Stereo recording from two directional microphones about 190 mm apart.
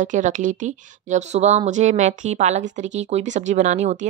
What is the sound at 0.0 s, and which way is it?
Speech, 40° right (ahead or behind).